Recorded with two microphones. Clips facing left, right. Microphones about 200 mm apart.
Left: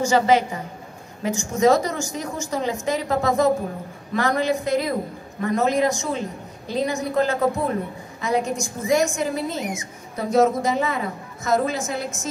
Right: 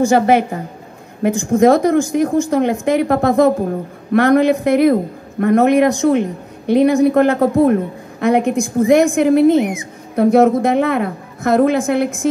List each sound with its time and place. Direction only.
0.0 s a woman's voice: 55° right (ahead or behind)